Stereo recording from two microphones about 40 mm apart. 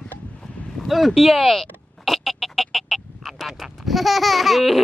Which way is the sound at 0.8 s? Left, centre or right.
Centre.